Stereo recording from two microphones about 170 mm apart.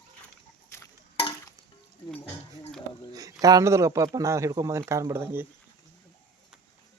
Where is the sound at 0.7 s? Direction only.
15° left (ahead or behind).